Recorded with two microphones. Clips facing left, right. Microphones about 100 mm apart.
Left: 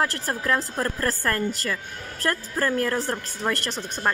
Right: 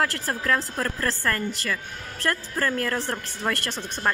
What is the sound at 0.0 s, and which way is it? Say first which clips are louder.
Speech: even; 20° left (ahead or behind).